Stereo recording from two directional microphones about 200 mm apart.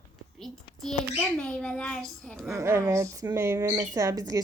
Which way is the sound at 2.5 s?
15° right (ahead or behind).